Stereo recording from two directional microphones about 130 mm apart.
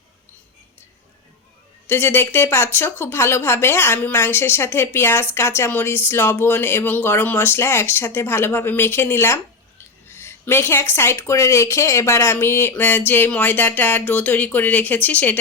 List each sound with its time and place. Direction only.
1.9 s speech: 20° left (ahead or behind)